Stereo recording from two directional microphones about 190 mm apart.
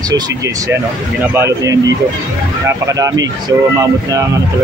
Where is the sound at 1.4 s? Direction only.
15° right (ahead or behind).